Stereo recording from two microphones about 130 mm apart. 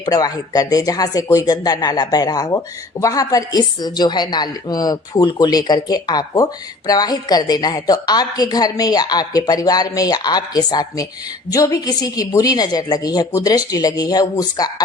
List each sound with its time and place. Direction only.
0.0 s a woman's voice: 30° left (ahead or behind)